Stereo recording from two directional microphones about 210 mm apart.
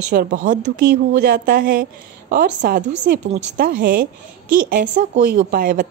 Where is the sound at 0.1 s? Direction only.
45° right (ahead or behind).